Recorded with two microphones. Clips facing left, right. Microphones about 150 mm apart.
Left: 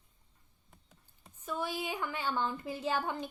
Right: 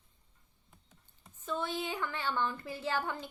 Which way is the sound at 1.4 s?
10° left (ahead or behind).